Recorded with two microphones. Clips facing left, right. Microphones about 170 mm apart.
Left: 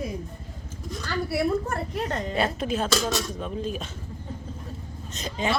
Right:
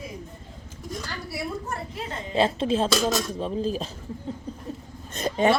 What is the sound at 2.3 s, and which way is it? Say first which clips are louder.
A woman's voice: right 7 dB; 25° right (ahead or behind).